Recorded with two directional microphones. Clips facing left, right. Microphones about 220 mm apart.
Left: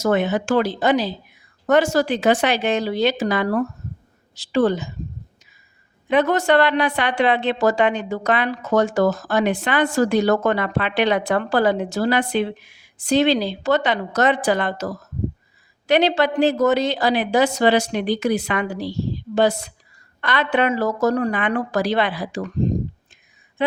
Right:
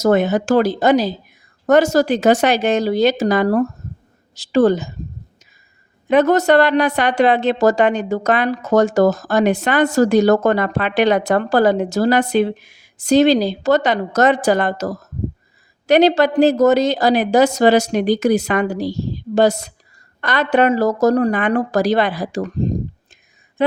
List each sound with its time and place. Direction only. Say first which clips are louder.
0.0 s a woman's voice: right 4 dB; 40° right (ahead or behind)
6.1 s a woman's voice: right 4 dB; 45° right (ahead or behind)
23.6 s speech: right 5 dB; 40° right (ahead or behind)